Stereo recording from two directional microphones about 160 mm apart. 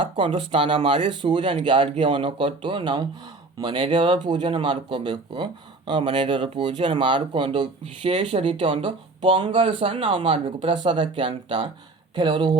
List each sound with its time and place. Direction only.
0.0 s speech: 35° right (ahead or behind)